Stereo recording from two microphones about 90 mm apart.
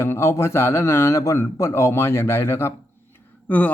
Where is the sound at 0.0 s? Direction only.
30° left (ahead or behind).